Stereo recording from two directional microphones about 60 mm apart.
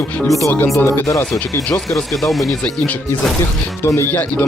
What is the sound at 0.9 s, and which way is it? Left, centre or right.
Speech, left.